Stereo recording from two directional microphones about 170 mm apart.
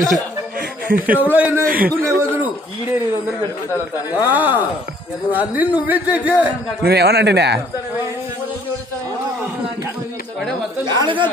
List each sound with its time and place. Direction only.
0.6 s a sound: 55° right (ahead or behind)
1.3 s speech: 10° right (ahead or behind)
1.7 s a man's voice: 55° right (ahead or behind)
2.0 s a sound: 15° right (ahead or behind)
4.1 s speech: 10° right (ahead or behind)
6.8 s speech: 70° right (ahead or behind)
10.9 s speech: 25° right (ahead or behind)